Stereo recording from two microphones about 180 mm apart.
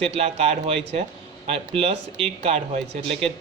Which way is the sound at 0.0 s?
35° right (ahead or behind).